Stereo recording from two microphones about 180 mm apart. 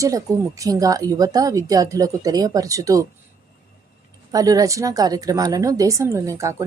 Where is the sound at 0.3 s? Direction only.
20° right (ahead or behind).